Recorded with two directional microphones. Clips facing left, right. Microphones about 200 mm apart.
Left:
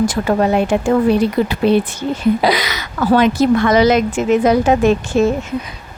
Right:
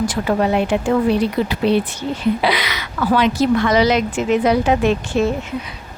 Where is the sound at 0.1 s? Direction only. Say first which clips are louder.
Left 2 dB; 45° left (ahead or behind).